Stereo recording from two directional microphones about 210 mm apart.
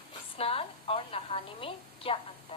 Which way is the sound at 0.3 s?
25° left (ahead or behind).